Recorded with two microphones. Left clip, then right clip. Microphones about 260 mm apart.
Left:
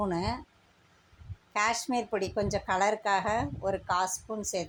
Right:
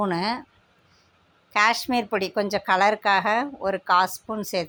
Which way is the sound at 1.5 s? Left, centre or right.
Right.